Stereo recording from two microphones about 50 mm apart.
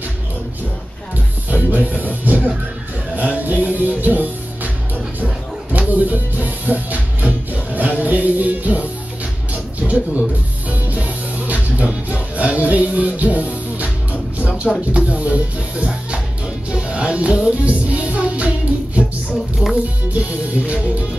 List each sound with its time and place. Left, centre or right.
1.5 s music: right
14.7 s speech: centre
15.0 s music: right
20.1 s music: right